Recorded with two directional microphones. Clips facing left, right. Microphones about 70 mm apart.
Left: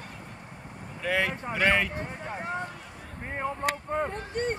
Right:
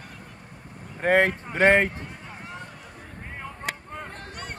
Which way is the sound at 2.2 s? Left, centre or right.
Left.